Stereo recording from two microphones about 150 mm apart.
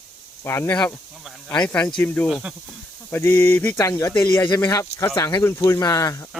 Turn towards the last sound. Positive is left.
turn(degrees=25)  # may be behind; listen again after turning